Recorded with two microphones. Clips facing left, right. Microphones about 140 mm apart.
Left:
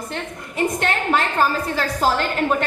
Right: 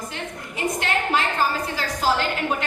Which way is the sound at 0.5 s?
50° left (ahead or behind).